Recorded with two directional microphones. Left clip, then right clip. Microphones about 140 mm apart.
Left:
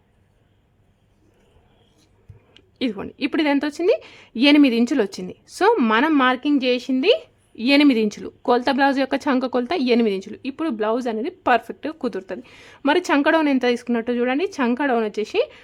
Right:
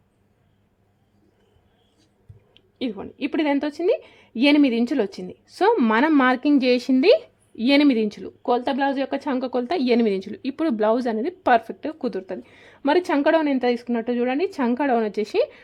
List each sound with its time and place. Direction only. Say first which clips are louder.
2.5 s a woman's voice: left 3 dB; 20° left (ahead or behind); by 5.9 s centre (ahead or behind)
5.9 s speech: left 1 dB; 15° right (ahead or behind)
7.5 s speech: left 1 dB; 10° right (ahead or behind)
7.8 s a woman's voice: left 2 dB; centre (ahead or behind)
9.6 s a woman's voice: right 1 dB; centre (ahead or behind)